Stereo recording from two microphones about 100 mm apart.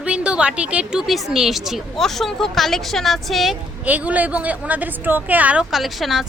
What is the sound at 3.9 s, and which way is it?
Speech, 15° right (ahead or behind).